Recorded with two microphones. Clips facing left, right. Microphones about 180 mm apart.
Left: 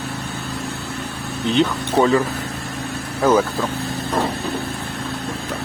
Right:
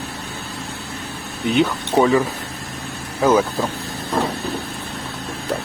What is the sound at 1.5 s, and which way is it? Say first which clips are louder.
Speech: even; 10° right (ahead or behind).